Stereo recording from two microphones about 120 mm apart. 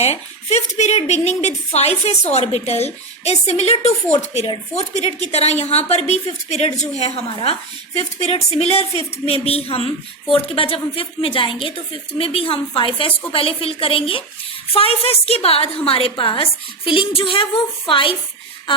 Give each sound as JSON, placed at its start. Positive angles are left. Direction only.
{"t": 0.0, "sound": "a woman's voice", "side_deg": 65}
{"t": 7.0, "sound": "a woman's voice", "side_deg": 50}